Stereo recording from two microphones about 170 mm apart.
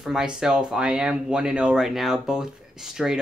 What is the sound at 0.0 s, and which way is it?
Speech, 5° right (ahead or behind).